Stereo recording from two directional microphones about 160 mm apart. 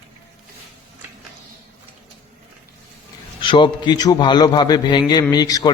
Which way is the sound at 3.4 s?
30° left (ahead or behind).